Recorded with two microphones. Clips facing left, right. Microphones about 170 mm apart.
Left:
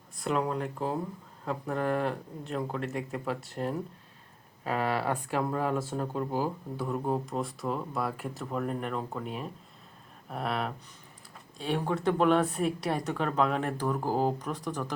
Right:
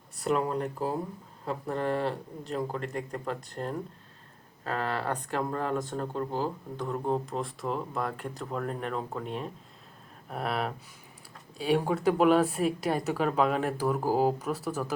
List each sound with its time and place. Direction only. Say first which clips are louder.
0.2 s a woman's voice: right 2 dB; centre (ahead or behind)